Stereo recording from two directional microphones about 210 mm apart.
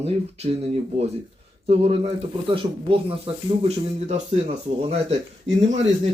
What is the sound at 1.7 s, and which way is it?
Speech, 30° right (ahead or behind).